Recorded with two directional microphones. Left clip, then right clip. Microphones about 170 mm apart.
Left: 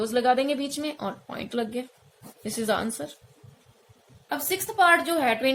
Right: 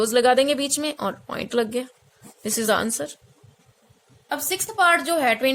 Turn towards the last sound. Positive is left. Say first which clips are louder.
# right 3 dB
turn(degrees=-35)  # may be behind; listen again after turning